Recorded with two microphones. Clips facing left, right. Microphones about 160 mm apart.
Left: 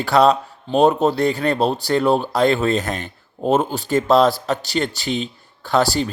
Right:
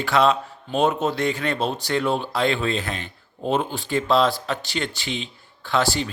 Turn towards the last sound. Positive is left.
turn(degrees=40)  # may be behind; listen again after turning